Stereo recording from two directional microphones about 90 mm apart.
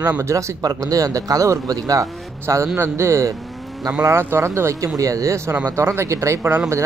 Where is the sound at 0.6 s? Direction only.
45° right (ahead or behind).